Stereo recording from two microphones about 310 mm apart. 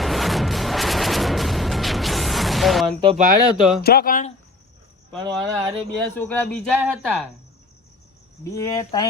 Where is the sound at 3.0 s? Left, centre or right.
Centre.